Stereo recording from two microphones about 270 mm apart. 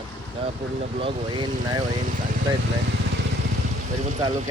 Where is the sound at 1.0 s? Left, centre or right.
Centre.